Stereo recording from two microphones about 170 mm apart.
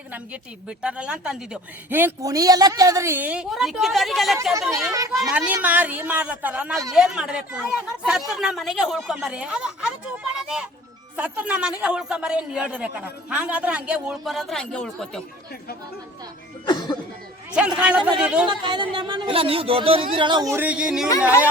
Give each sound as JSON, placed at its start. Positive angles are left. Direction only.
{"t": 0.8, "sound": "a man's voice", "side_deg": -5}
{"t": 16.6, "sound": "speech", "side_deg": 25}
{"t": 17.5, "sound": "a woman's voice", "side_deg": -5}
{"t": 18.4, "sound": "a woman's voice", "side_deg": -25}